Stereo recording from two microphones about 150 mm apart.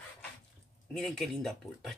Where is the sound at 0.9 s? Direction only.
Centre (ahead or behind).